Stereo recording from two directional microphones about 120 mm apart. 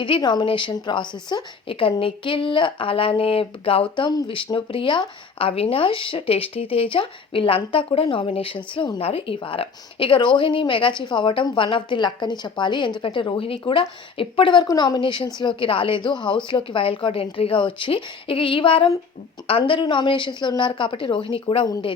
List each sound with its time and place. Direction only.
0.0 s a woman's voice: 40° left (ahead or behind)